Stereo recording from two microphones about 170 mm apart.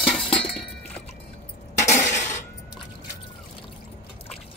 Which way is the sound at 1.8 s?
45° left (ahead or behind).